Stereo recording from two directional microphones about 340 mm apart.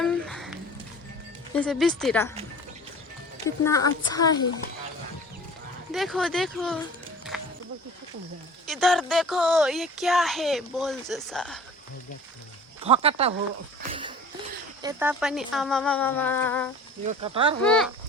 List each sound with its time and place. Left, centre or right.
0.0 s a sound: centre
1.5 s speech: centre
3.4 s speech: centre
5.9 s speech: centre
7.3 s music: centre
8.6 s speech: centre
12.8 s speech: centre
14.8 s speech: centre
17.1 s speech: centre
17.6 s speech: centre